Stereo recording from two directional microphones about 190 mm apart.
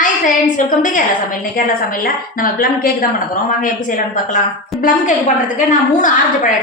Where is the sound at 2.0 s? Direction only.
50° left (ahead or behind).